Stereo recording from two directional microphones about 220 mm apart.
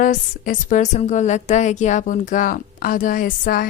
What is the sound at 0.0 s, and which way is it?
A woman's voice, 40° left (ahead or behind).